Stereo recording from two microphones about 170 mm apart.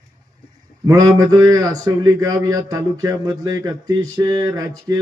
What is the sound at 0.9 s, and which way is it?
Speech, 20° right (ahead or behind).